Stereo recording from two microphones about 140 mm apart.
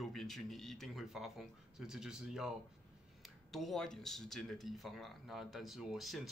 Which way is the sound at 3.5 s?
Centre (ahead or behind).